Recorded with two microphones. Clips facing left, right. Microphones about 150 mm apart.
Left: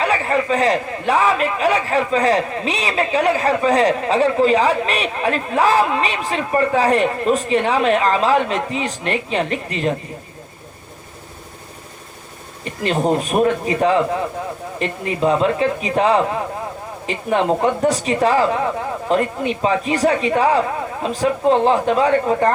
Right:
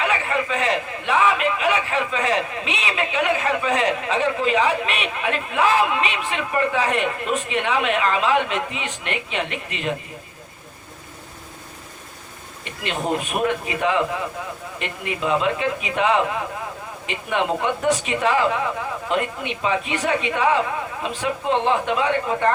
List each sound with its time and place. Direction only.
0.0 s a man's voice: 40° left (ahead or behind)
12.6 s a man's voice: 35° left (ahead or behind)